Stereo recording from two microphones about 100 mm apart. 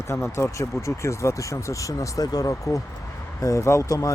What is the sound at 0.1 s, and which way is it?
Speech, 25° left (ahead or behind).